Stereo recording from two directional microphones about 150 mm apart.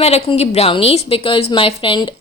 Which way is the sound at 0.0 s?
40° left (ahead or behind).